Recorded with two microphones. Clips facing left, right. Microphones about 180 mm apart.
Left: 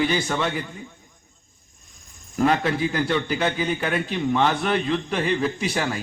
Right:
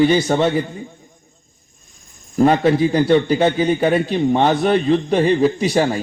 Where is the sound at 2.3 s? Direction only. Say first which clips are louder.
Right 7 dB; 35° right (ahead or behind).